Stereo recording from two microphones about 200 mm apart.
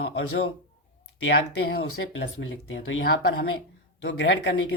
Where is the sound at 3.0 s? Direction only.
60° left (ahead or behind).